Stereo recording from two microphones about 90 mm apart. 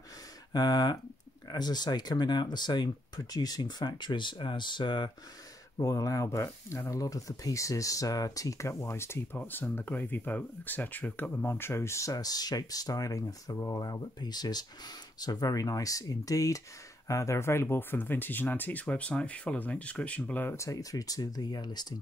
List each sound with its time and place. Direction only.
0.5 s speech: 50° left (ahead or behind)
5.8 s speech: 40° left (ahead or behind); by 20.5 s 20° left (ahead or behind)
20.5 s speech: 35° left (ahead or behind)